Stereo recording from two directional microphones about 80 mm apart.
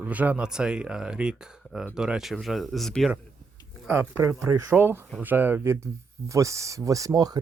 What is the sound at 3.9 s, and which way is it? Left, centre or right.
Speech, right.